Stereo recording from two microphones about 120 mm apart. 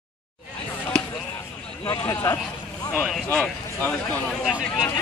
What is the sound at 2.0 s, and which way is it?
Speech, 20° left (ahead or behind).